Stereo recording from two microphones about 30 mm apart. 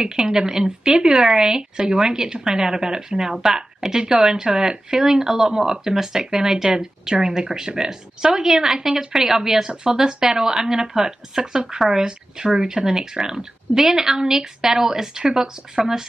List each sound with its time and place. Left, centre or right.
0.2 s speech: centre
4.4 s speech: right